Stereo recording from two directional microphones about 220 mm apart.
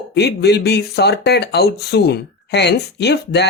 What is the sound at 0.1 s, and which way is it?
Speech, 50° left (ahead or behind).